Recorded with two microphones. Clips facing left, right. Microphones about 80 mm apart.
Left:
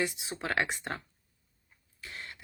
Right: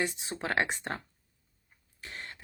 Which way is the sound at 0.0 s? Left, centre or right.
Right.